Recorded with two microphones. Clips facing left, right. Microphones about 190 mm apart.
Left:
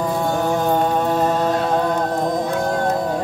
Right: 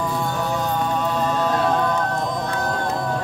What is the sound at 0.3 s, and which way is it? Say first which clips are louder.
Music: left 5 dB; 50° left (ahead or behind).